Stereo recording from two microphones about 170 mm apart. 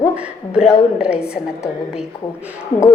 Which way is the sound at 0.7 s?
5° right (ahead or behind).